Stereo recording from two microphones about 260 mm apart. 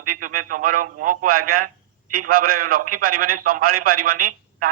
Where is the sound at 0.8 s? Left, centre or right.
Right.